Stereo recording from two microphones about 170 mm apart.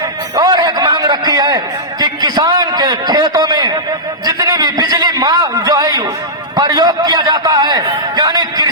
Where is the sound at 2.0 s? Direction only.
25° right (ahead or behind).